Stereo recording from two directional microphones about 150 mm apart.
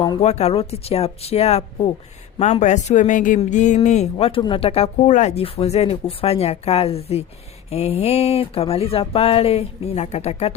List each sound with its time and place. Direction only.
0.2 s speech: 45° left (ahead or behind)